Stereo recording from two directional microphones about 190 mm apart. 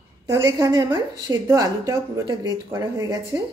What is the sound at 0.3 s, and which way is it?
A woman's voice, 20° right (ahead or behind).